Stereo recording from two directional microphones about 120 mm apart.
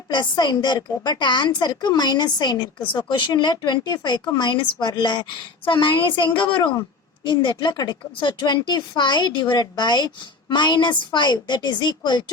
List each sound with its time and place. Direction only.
0.1 s speech: 40° left (ahead or behind)